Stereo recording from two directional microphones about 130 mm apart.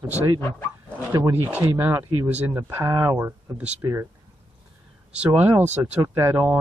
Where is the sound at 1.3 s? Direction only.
15° right (ahead or behind).